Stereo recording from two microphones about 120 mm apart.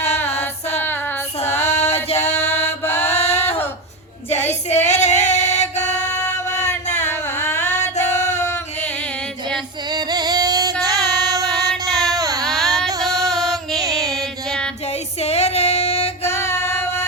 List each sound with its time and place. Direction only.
0.3 s music: 65° left (ahead or behind)
2.6 s mantra: 65° left (ahead or behind)
4.3 s female singing: 70° left (ahead or behind)
7.1 s a sound: 20° left (ahead or behind)
7.6 s music: 75° left (ahead or behind)
8.2 s music: 25° left (ahead or behind)
9.9 s music: 35° right (ahead or behind)
11.9 s a sound: centre (ahead or behind)
12.2 s baby cry: 30° right (ahead or behind)
12.5 s a sound: centre (ahead or behind)
13.1 s music: 30° right (ahead or behind)
14.1 s child singing: 5° left (ahead or behind)
15.2 s female singing: 65° left (ahead or behind)
16.2 s music: 20° left (ahead or behind)